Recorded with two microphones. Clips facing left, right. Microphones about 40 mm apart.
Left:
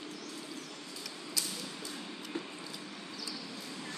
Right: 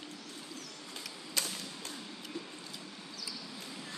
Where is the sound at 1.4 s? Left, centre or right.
Right.